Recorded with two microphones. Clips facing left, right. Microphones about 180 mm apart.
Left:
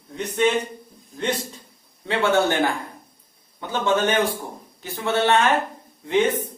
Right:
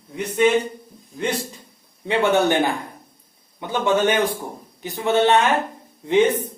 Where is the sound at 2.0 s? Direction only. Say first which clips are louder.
Right 2 dB; 15° right (ahead or behind).